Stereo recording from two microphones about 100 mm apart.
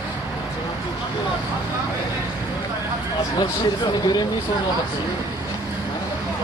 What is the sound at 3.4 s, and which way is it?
Speech, 50° left (ahead or behind).